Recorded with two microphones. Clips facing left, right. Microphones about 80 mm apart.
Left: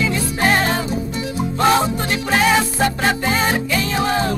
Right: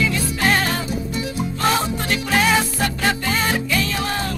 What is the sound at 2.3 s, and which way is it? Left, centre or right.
Music, centre.